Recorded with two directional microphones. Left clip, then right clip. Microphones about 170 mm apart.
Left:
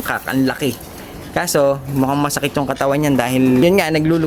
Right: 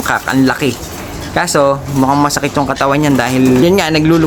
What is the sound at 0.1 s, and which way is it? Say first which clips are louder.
A man's voice: right 6 dB; 15° left (ahead or behind).